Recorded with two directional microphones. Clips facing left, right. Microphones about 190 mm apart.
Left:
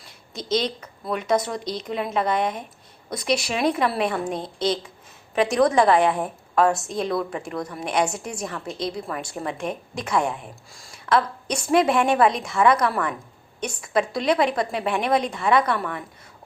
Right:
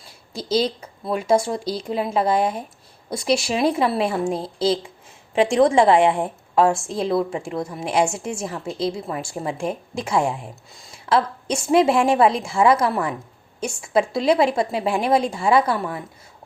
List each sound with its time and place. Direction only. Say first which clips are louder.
0.3 s a woman's voice: right 3 dB; 30° right (ahead or behind)